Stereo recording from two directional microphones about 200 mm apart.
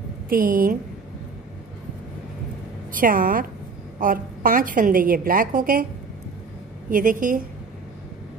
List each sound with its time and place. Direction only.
0.3 s a woman's voice: 45° right (ahead or behind)
2.9 s a woman's voice: 45° right (ahead or behind)
6.9 s a woman's voice: 40° right (ahead or behind)